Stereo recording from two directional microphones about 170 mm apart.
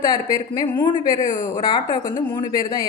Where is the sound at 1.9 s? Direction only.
50° left (ahead or behind).